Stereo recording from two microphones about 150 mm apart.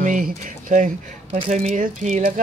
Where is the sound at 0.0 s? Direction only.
60° right (ahead or behind).